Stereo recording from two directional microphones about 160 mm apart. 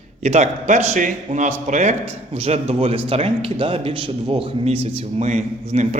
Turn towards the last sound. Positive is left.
turn(degrees=-45)  # may be behind; listen again after turning